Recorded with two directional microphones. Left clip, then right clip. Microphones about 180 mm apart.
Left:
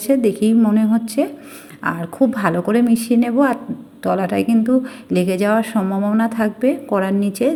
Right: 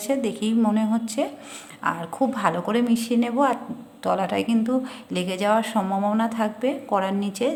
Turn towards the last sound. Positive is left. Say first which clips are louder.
# left 5 dB
turn(degrees=15)  # may be behind; listen again after turning